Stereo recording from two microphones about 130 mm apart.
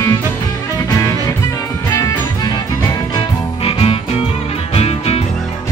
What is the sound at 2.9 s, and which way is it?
Music, 40° left (ahead or behind).